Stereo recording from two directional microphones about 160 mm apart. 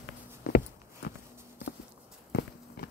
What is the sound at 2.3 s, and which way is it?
Walk, 90° left.